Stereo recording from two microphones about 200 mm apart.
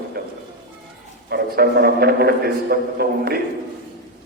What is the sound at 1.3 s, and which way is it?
A man's voice, 55° right (ahead or behind).